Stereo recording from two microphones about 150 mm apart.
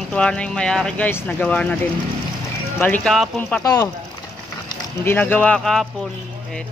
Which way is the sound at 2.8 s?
10° left (ahead or behind).